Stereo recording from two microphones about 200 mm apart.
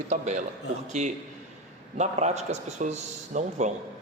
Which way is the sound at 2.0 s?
35° right (ahead or behind).